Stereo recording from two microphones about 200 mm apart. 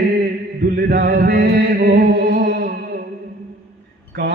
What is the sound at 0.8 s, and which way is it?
Mantra, 50° right (ahead or behind).